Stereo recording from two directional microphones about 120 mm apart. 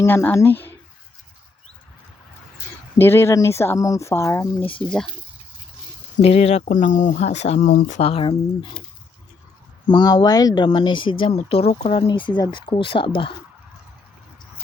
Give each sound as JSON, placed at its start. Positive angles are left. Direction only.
{"t": 0.0, "sound": "speech", "side_deg": 20}
{"t": 3.0, "sound": "speech", "side_deg": 20}
{"t": 4.7, "sound": "speech", "side_deg": 5}
{"t": 6.2, "sound": "speech", "side_deg": 60}
{"t": 8.0, "sound": "speech", "side_deg": 50}
{"t": 9.9, "sound": "speech", "side_deg": 35}
{"t": 11.3, "sound": "speech", "side_deg": 60}
{"t": 12.0, "sound": "speech", "side_deg": 40}